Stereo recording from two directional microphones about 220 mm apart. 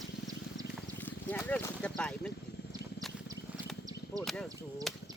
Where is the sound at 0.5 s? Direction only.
5° left (ahead or behind).